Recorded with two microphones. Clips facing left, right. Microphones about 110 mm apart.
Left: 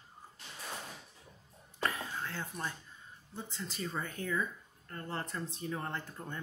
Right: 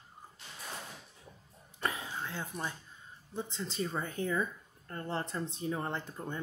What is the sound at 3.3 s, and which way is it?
Speech, 20° right (ahead or behind).